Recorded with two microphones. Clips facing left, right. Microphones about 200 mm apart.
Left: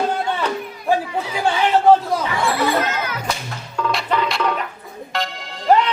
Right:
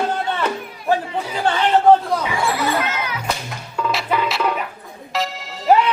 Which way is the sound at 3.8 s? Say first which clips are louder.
Even; 5° right (ahead or behind).